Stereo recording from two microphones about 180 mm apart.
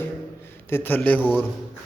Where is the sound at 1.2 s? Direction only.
5° right (ahead or behind).